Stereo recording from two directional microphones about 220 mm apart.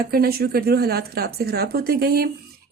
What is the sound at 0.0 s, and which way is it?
Speech, 45° right (ahead or behind).